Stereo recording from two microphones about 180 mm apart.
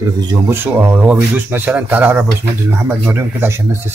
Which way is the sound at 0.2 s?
25° right (ahead or behind).